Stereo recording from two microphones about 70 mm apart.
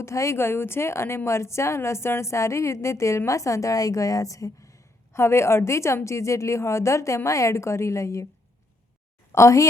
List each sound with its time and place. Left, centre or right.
0.0 s a woman's voice: left
9.3 s a woman's voice: left